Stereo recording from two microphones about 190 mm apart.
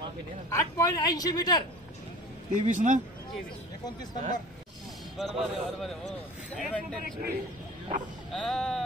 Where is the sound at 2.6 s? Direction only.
40° right (ahead or behind).